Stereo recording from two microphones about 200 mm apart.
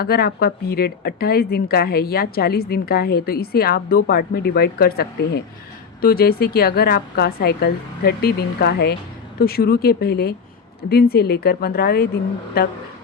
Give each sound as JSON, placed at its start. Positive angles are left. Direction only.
{"t": 0.0, "sound": "speech", "side_deg": 50}